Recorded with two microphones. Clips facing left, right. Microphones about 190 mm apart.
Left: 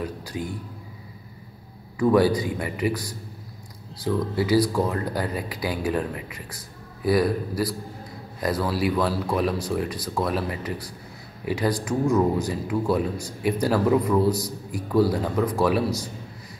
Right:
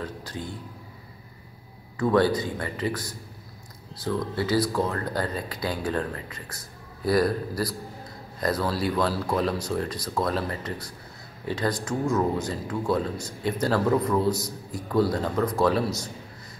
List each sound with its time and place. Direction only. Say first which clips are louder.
0.0 s speech: left 4 dB; 15° left (ahead or behind)
2.0 s speech: left 3 dB; 10° left (ahead or behind)